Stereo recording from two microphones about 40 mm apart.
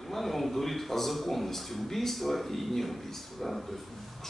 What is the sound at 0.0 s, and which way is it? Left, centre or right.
A man's voice, centre.